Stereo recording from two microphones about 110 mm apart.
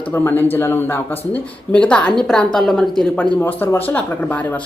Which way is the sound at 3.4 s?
20° left (ahead or behind).